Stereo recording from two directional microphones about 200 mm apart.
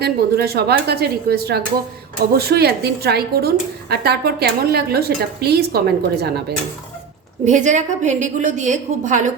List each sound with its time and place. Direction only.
0.0 s a woman's voice: 50° right (ahead or behind)
7.4 s a woman's voice: 35° right (ahead or behind)